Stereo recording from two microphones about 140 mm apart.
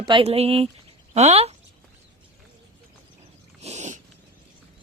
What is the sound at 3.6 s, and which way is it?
Speech, 55° right (ahead or behind).